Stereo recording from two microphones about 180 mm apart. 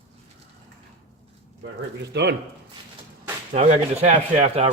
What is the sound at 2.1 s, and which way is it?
Speech, 70° right (ahead or behind).